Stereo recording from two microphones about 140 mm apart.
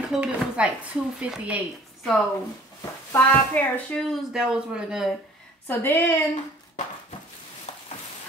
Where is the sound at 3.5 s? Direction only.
10° left (ahead or behind).